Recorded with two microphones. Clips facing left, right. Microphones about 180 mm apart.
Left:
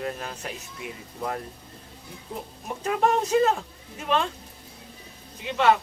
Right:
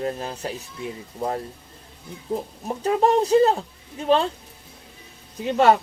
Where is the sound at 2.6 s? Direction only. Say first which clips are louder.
Right 4 dB; 35° right (ahead or behind).